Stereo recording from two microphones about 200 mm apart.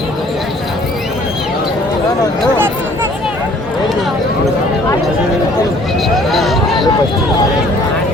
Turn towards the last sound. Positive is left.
turn(degrees=0)  # may be behind; listen again after turning